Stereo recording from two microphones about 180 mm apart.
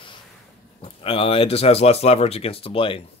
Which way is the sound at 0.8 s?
30° left (ahead or behind).